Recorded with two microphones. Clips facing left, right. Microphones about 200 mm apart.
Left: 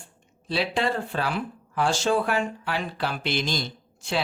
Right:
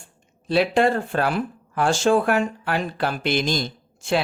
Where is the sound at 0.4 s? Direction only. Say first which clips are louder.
Right 7 dB; 50° right (ahead or behind).